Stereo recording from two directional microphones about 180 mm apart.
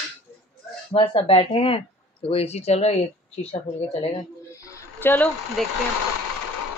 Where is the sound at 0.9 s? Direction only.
30° left (ahead or behind).